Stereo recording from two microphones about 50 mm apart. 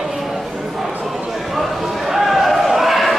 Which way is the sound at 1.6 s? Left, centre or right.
Centre.